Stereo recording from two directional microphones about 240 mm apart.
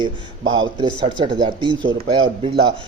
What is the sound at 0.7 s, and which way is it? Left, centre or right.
A man's voice, centre.